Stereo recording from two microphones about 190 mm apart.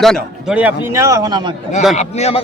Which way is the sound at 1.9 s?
35° left (ahead or behind).